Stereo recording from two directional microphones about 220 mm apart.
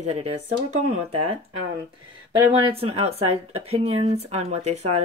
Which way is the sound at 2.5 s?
25° right (ahead or behind).